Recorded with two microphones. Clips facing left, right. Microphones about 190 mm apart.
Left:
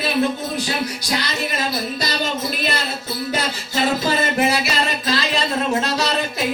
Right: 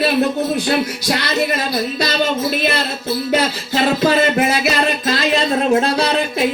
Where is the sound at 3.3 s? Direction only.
60° right (ahead or behind).